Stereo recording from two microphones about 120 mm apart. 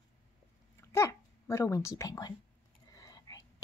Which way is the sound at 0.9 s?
25° left (ahead or behind).